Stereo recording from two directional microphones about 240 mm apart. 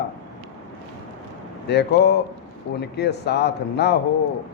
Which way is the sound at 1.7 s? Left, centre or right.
Left.